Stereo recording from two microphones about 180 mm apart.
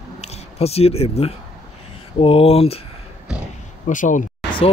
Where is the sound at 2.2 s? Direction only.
30° left (ahead or behind).